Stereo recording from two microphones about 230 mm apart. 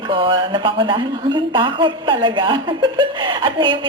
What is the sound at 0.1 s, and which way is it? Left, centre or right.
A woman's voice, right.